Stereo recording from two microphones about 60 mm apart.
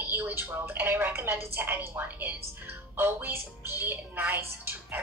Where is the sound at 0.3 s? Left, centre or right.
Right.